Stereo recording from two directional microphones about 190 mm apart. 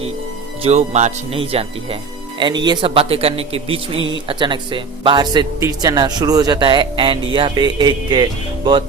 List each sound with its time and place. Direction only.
0.6 s speech: 35° right (ahead or behind)